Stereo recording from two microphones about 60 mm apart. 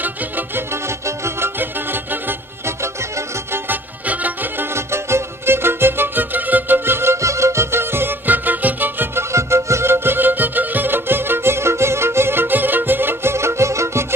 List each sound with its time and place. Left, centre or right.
0.6 s music: right
1.6 s music: right
4.1 s music: right
4.7 s music: right
9.3 s music: right